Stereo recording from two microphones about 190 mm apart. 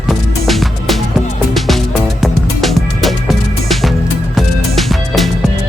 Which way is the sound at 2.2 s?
Centre (ahead or behind).